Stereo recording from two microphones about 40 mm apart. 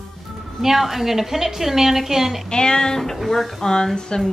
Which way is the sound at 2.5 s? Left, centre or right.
Centre.